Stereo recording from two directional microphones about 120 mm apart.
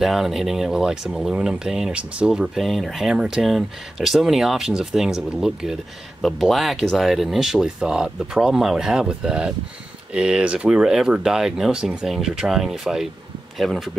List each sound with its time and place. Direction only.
0.0 s speech: centre (ahead or behind)